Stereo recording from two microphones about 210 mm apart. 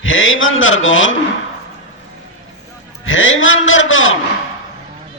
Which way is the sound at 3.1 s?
70° left (ahead or behind).